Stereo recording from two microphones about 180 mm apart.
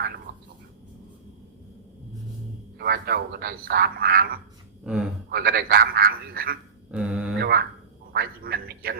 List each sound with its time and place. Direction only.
2.7 s speech: 60° right (ahead or behind)
4.8 s speech: 5° right (ahead or behind)
5.3 s speech: 60° right (ahead or behind)
6.9 s mantra: 5° right (ahead or behind)
7.3 s a sound: 60° right (ahead or behind)
8.1 s speech: 60° right (ahead or behind)